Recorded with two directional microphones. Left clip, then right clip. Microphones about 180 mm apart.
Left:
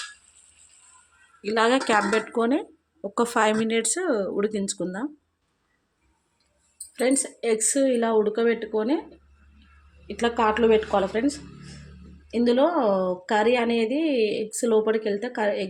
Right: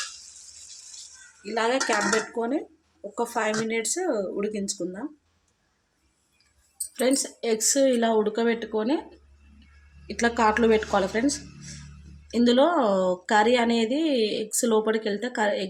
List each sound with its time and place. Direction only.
1.5 s speech: 50° left (ahead or behind)
6.9 s speech: 10° left (ahead or behind)
10.1 s a woman's voice: 5° left (ahead or behind)